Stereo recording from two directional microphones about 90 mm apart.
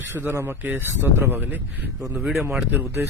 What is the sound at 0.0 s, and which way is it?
A man's voice, 25° right (ahead or behind).